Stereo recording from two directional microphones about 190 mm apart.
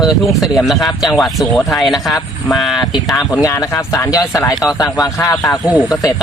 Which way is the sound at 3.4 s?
15° left (ahead or behind).